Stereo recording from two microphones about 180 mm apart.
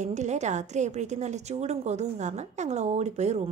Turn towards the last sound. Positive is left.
turn(degrees=-40)  # may be behind; listen again after turning